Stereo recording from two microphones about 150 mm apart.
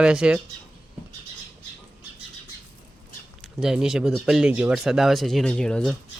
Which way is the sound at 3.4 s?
5° right (ahead or behind).